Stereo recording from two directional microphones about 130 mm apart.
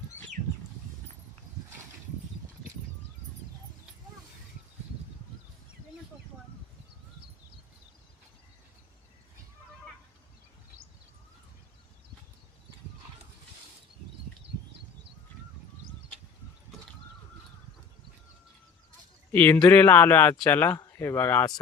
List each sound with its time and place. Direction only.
19.3 s speech: 10° left (ahead or behind)